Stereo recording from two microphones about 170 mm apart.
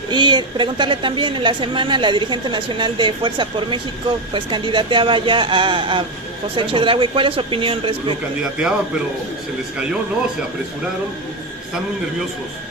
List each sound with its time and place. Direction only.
0.1 s a woman's voice: 25° right (ahead or behind)
8.5 s a man's voice: 5° right (ahead or behind)